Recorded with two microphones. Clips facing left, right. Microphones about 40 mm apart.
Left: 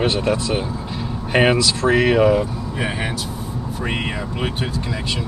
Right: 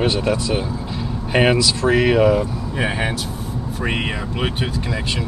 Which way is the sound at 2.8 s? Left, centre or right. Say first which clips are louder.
Right 3 dB; right.